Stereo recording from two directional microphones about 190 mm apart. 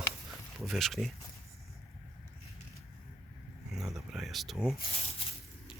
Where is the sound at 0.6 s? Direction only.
Centre (ahead or behind).